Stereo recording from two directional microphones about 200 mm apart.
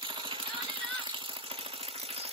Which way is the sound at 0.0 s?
25° right (ahead or behind).